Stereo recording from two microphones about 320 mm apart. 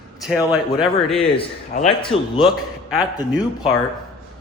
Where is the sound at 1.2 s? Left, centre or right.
Centre.